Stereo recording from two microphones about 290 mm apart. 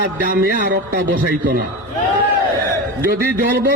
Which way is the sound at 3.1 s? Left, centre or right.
Right.